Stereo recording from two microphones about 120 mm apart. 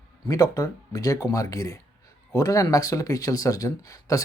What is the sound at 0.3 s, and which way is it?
Speech, 30° left (ahead or behind).